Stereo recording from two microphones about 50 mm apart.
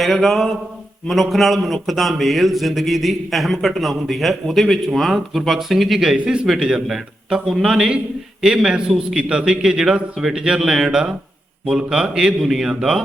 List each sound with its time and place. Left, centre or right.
0.0 s speech: centre
6.2 s a man's voice: centre